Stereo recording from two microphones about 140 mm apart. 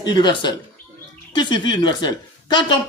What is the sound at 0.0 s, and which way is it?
Speech, 30° left (ahead or behind).